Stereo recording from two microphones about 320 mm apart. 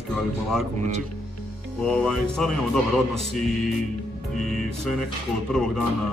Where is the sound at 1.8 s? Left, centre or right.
Centre.